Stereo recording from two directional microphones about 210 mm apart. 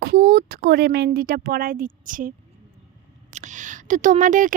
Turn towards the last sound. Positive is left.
turn(degrees=-40)  # may be behind; listen again after turning